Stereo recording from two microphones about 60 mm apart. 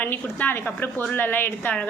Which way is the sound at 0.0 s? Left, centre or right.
Left.